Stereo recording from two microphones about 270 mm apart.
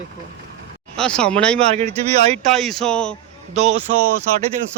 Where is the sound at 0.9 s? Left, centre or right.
Centre.